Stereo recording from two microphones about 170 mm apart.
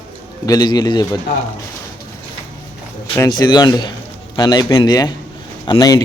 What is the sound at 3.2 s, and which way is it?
Speech, 25° left (ahead or behind).